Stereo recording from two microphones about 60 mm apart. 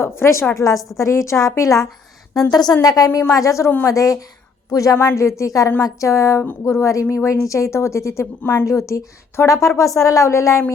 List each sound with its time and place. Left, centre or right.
0.0 s a woman's voice: left
0.5 s a woman's voice: left
2.3 s a woman's voice: left
3.1 s a woman's voice: left
3.3 s a woman's voice: left
4.7 s a woman's voice: left
5.1 s a woman's voice: left
8.6 s a woman's voice: left